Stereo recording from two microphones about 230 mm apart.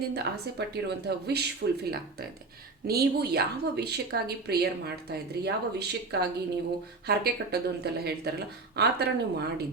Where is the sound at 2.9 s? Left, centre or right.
Right.